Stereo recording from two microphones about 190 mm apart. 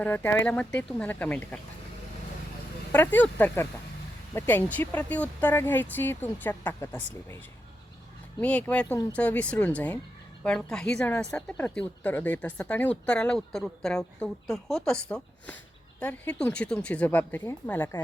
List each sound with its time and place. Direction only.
0.0 s speech: 10° left (ahead or behind)
2.9 s speech: 10° left (ahead or behind)
8.4 s a woman's voice: 10° left (ahead or behind)